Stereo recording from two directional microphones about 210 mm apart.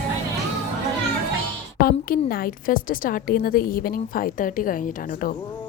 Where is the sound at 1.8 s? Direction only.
45° left (ahead or behind).